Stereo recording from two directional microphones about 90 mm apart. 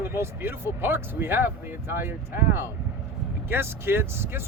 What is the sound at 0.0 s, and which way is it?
Speech, 25° right (ahead or behind).